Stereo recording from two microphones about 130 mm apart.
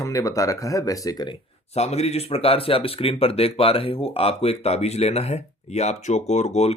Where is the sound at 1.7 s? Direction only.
55° left (ahead or behind).